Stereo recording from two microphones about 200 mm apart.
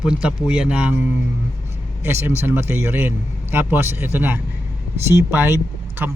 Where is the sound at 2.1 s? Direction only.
10° right (ahead or behind).